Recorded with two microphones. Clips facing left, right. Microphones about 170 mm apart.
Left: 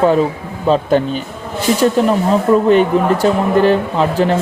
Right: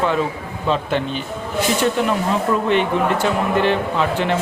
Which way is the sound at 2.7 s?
40° left (ahead or behind).